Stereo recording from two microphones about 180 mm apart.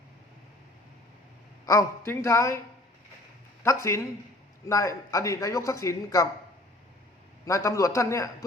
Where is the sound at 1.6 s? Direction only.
15° left (ahead or behind).